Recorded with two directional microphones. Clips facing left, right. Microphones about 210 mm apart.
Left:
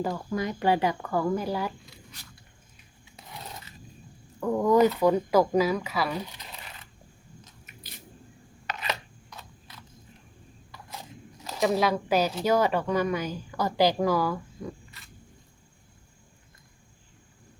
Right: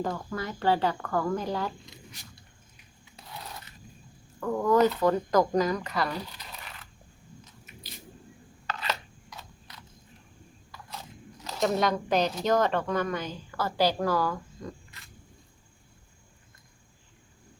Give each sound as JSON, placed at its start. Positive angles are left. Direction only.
{"t": 0.3, "sound": "speech", "side_deg": 15}
{"t": 4.4, "sound": "speech", "side_deg": 15}
{"t": 8.6, "sound": "chopping", "side_deg": 20}
{"t": 11.4, "sound": "speech", "side_deg": 5}